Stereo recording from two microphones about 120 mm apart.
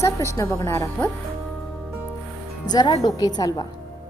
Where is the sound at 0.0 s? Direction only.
25° left (ahead or behind).